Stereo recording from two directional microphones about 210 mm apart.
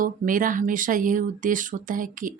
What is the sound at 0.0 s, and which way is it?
Speech, 40° right (ahead or behind).